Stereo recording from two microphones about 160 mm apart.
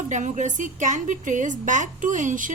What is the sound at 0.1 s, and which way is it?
A woman's voice, 50° right (ahead or behind).